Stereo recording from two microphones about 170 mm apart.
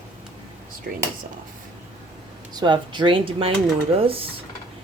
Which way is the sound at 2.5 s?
25° right (ahead or behind).